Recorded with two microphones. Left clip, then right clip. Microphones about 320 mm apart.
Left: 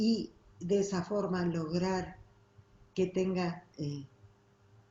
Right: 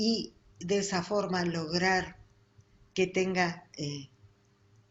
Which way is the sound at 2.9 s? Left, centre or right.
Right.